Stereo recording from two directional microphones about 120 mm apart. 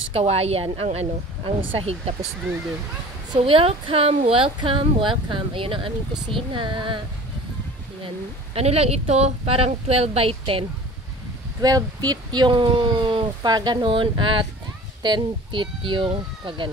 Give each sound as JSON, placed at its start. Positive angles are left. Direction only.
{"t": 0.1, "sound": "speech", "side_deg": -55}
{"t": 3.3, "sound": "a woman's voice", "side_deg": -50}
{"t": 8.5, "sound": "speech", "side_deg": -55}
{"t": 11.6, "sound": "speech", "side_deg": -30}